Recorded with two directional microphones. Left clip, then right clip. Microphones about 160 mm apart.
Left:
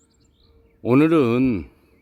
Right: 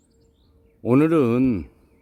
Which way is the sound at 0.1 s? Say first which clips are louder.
Right 1 dB; 50° left (ahead or behind).